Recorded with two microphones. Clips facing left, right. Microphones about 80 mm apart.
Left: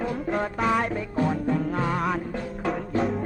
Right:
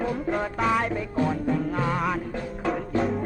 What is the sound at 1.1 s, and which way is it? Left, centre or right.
Music, centre.